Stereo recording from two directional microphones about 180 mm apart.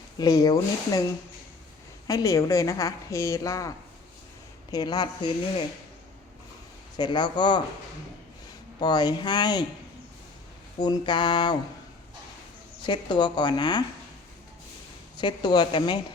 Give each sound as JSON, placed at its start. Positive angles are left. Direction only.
{"t": 0.2, "sound": "speech", "side_deg": 20}
{"t": 2.0, "sound": "a woman's voice", "side_deg": 20}
{"t": 4.7, "sound": "speech", "side_deg": 20}
{"t": 6.9, "sound": "speech", "side_deg": 25}
{"t": 8.8, "sound": "speech", "side_deg": 25}
{"t": 10.8, "sound": "speech", "side_deg": 25}
{"t": 12.8, "sound": "speech", "side_deg": 25}
{"t": 15.2, "sound": "speech", "side_deg": 25}